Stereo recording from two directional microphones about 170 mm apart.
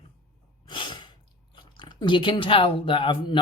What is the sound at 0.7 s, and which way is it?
Sneeze, 30° left (ahead or behind).